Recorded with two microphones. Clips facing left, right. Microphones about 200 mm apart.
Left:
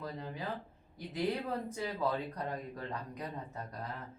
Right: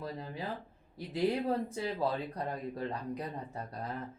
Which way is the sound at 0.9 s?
30° right (ahead or behind).